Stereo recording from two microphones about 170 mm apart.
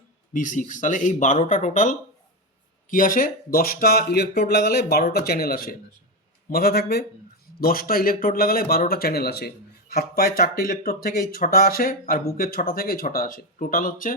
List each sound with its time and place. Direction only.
0.3 s speech: 45° left (ahead or behind)